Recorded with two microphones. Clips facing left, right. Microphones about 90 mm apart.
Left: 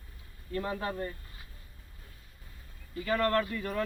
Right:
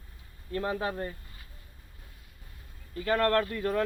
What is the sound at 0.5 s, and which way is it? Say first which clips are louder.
Speech: right 3 dB; 65° right (ahead or behind).